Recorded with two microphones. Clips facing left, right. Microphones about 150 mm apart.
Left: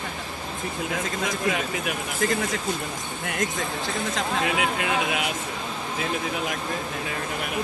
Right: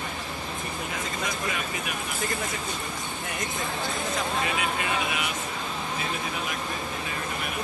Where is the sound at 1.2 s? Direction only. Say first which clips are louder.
Left 6 dB; 75° left (ahead or behind).